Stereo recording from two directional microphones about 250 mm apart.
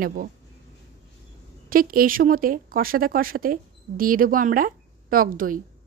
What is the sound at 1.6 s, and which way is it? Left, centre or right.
Speech, right.